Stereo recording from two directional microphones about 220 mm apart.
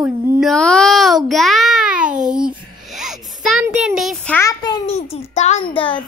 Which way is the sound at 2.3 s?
5° right (ahead or behind).